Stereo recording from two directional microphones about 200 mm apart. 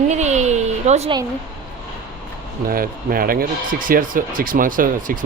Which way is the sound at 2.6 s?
45° right (ahead or behind).